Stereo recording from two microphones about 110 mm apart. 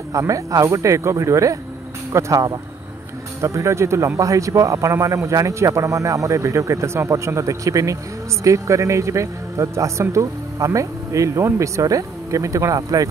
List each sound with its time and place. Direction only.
0.1 s speech: 30° right (ahead or behind)